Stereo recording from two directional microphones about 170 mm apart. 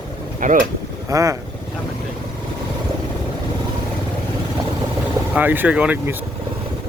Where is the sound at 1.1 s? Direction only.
20° right (ahead or behind).